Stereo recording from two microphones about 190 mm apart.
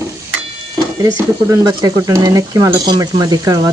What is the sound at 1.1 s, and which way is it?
Speech, 15° right (ahead or behind).